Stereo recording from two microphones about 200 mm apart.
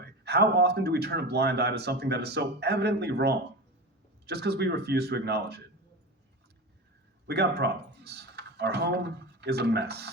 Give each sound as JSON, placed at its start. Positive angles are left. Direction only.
{"t": 0.0, "sound": "a man's voice", "side_deg": -55}
{"t": 7.3, "sound": "speech", "side_deg": -55}